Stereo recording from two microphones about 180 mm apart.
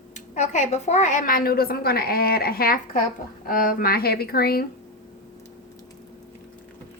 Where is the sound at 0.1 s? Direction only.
40° left (ahead or behind); by 4.6 s 60° left (ahead or behind).